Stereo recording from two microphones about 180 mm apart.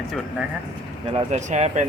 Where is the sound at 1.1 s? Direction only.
40° right (ahead or behind).